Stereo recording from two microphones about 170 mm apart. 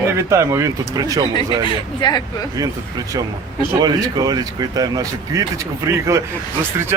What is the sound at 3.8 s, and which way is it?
Speech, 25° right (ahead or behind).